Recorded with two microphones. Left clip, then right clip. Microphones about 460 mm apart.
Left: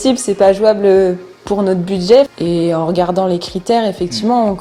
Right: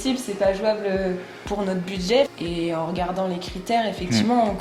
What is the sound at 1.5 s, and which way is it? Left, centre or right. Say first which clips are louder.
Speech: left 11 dB; left.